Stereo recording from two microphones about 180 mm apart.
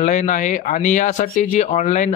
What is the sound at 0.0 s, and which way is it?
Speech, 45° left (ahead or behind).